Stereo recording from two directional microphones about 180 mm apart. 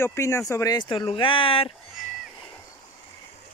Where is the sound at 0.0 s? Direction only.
15° left (ahead or behind); by 1.7 s 30° left (ahead or behind).